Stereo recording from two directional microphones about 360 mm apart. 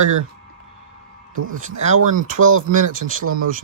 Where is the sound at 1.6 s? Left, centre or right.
Centre.